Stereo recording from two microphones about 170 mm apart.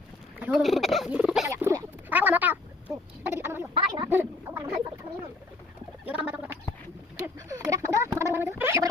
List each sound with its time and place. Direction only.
0.4 s speech: centre (ahead or behind)
1.5 s a sound: 15° right (ahead or behind)
3.8 s speech: 25° right (ahead or behind)
4.5 s a sound: 10° right (ahead or behind)
6.1 s gargling: 10° right (ahead or behind)
7.2 s gargling: 20° right (ahead or behind)